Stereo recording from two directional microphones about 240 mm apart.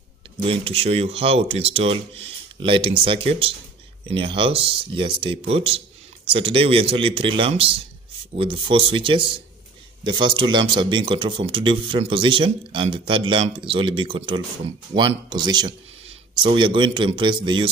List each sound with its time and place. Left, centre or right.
0.5 s speech: right